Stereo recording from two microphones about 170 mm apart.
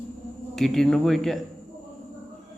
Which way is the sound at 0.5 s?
Centre (ahead or behind).